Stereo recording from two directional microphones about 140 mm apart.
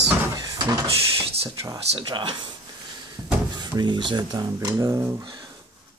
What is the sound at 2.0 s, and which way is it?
Speech, 35° right (ahead or behind).